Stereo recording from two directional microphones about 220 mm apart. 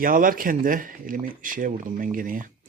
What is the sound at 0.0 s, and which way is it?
Speech, 40° right (ahead or behind).